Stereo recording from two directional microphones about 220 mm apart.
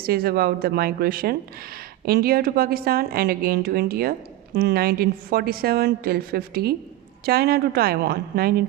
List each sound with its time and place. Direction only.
0.0 s speech: 45° right (ahead or behind)